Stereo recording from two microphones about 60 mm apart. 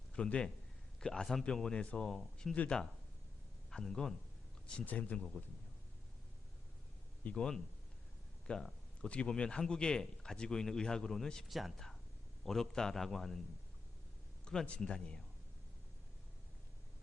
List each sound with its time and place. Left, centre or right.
0.1 s a man's voice: centre
3.7 s a man's voice: centre
4.9 s a man's voice: left
7.3 s a man's voice: centre
14.4 s a man's voice: centre